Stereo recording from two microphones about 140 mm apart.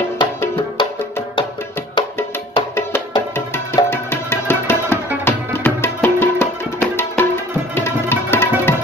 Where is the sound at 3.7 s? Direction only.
15° left (ahead or behind).